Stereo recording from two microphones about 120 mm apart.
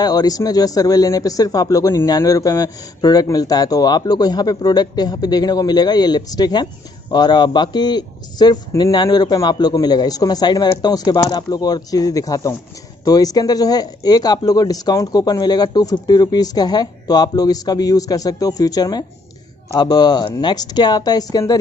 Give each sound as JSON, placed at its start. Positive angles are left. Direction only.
{"t": 0.0, "sound": "speech", "side_deg": 35}